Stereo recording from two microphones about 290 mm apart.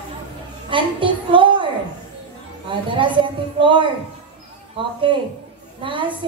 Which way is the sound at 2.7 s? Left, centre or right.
Centre.